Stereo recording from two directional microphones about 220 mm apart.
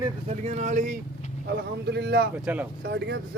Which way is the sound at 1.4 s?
50° right (ahead or behind).